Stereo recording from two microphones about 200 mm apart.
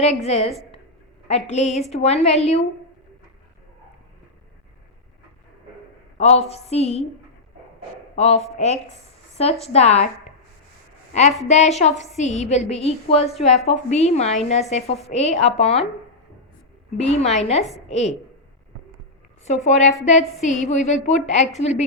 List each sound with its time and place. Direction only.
0.0 s a woman's voice: 35° left (ahead or behind)
6.1 s a woman's voice: 30° left (ahead or behind)
8.1 s a woman's voice: 30° left (ahead or behind)
11.1 s a woman's voice: 35° left (ahead or behind)
17.0 s a woman's voice: 35° left (ahead or behind)
19.5 s a woman's voice: 35° left (ahead or behind)